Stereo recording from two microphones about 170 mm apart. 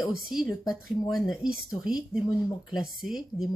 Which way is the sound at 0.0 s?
Centre (ahead or behind).